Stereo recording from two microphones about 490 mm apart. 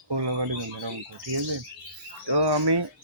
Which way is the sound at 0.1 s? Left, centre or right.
Right.